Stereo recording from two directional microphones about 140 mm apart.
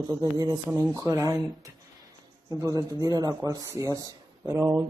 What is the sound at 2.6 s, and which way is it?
Speech, 25° right (ahead or behind).